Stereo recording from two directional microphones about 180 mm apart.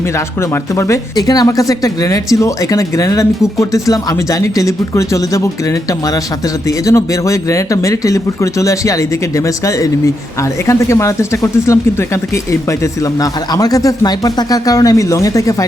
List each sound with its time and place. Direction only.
0.5 s speech: 15° left (ahead or behind)
6.7 s speech: 15° left (ahead or behind)